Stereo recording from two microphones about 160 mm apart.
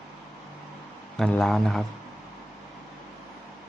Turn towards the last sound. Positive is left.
turn(degrees=0)  # may be behind; listen again after turning